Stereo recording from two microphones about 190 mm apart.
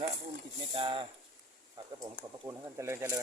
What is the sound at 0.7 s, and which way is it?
Speech, 25° right (ahead or behind).